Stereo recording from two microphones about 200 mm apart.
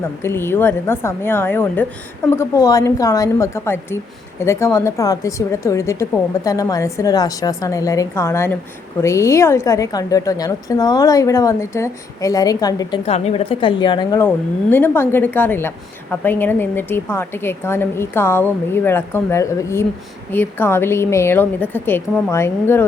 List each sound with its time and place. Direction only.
0.0 s a woman's voice: 10° left (ahead or behind)
13.1 s a woman's voice: 30° left (ahead or behind); by 22.9 s 10° left (ahead or behind)